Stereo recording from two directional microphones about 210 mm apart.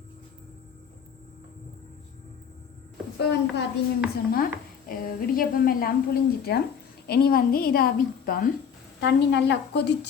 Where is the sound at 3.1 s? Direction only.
55° left (ahead or behind).